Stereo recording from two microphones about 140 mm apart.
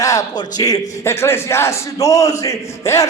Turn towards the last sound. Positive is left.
turn(degrees=20)  # may be behind; listen again after turning